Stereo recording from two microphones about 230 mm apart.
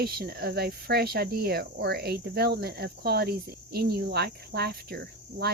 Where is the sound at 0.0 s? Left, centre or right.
Right.